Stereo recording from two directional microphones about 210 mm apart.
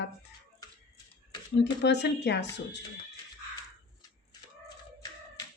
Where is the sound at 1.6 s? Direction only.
55° left (ahead or behind).